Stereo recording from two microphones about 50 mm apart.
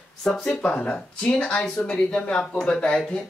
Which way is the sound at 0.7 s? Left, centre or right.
Left.